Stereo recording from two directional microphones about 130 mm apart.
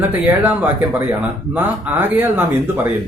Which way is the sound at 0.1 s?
15° right (ahead or behind).